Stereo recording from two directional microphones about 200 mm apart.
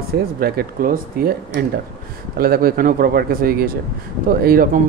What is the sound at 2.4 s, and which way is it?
Speech, 50° right (ahead or behind).